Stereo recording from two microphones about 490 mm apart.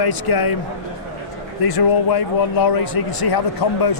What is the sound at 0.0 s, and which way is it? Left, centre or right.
Speech, left.